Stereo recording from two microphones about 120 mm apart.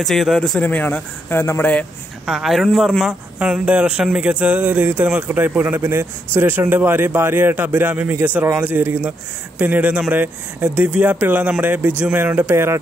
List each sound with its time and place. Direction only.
0.0 s speech: centre (ahead or behind)
2.2 s speech: centre (ahead or behind); by 12.7 s 20° right (ahead or behind)